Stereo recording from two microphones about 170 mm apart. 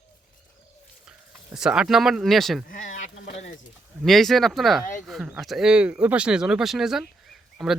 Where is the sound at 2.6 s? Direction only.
50° left (ahead or behind).